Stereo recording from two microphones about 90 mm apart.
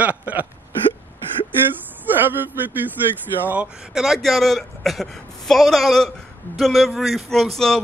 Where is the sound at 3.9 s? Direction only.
5° right (ahead or behind).